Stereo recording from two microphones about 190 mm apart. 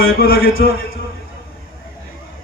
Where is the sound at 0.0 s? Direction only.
50° left (ahead or behind).